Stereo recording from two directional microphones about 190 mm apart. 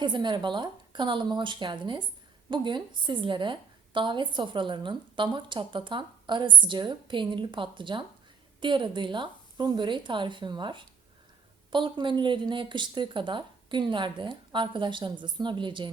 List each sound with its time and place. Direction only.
0.0 s a woman's voice: 25° right (ahead or behind)